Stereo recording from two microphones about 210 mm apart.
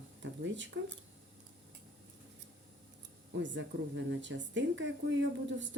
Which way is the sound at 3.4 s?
60° right (ahead or behind).